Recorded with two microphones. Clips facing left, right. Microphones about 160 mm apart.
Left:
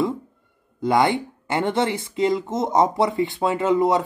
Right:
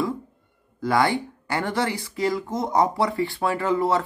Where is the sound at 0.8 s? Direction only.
20° left (ahead or behind).